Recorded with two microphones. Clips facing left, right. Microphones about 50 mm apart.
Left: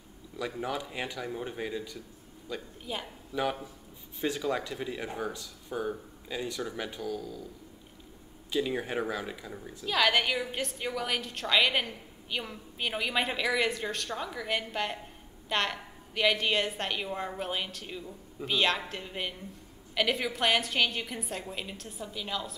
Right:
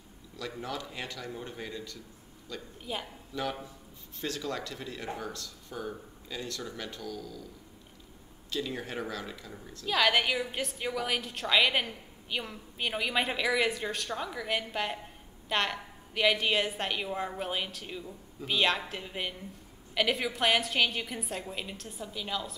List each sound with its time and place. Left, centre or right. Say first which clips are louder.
0.6 s speech: left 3 dB; centre
2.8 s a woman's voice: right 3 dB; centre
3.3 s speech: left 3 dB; centre
8.5 s speech: left 5 dB; centre
9.8 s a woman's voice: even; centre